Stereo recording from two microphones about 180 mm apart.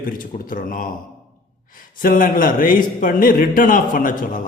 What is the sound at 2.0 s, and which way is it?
Speech, 50° left (ahead or behind).